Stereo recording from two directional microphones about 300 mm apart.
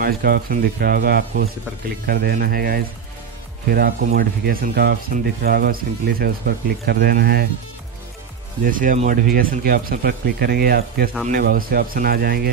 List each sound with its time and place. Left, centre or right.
0.0 s speech: right
8.6 s speech: right